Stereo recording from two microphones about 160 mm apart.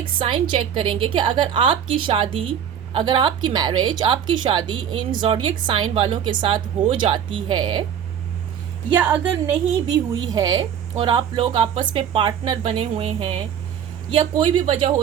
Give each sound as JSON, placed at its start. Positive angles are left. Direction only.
{"t": 0.0, "sound": "a woman's voice", "side_deg": -30}
{"t": 8.9, "sound": "speech", "side_deg": -10}
{"t": 10.1, "sound": "a woman's voice", "side_deg": -25}
{"t": 14.6, "sound": "a woman's voice", "side_deg": -40}